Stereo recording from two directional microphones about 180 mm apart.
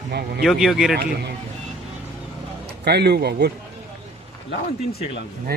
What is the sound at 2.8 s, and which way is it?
Speech, 65° right (ahead or behind).